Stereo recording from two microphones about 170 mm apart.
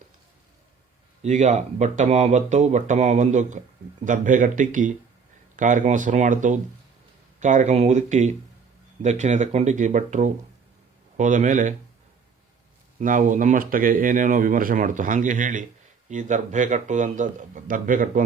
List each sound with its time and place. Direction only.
1.2 s speech: 45° right (ahead or behind)
13.0 s speech: 50° right (ahead or behind)